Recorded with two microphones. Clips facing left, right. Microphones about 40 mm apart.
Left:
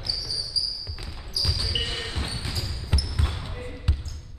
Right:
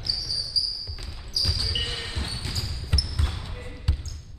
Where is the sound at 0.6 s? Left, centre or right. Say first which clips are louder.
Right 1 dB; centre.